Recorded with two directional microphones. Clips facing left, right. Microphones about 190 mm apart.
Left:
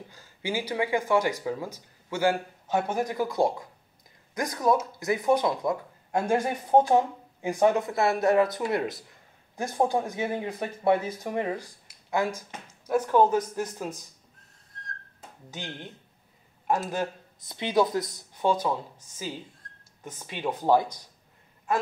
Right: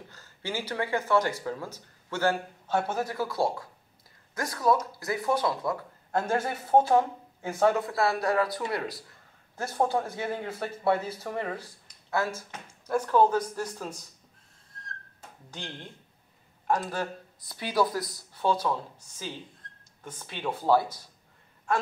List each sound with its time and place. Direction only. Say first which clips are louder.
0.1 s speech: left 4 dB; 10° left (ahead or behind)
15.5 s speech: left 2 dB; 5° left (ahead or behind)
17.4 s speech: left 3 dB; 20° left (ahead or behind)